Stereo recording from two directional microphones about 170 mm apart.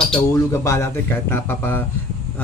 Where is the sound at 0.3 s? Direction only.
15° left (ahead or behind).